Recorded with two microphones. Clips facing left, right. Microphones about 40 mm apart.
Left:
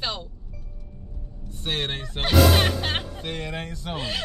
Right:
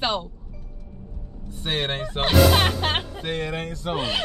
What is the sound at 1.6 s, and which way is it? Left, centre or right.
Speech, centre.